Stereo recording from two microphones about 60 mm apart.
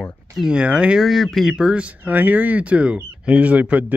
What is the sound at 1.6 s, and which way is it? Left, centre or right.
Speech, centre.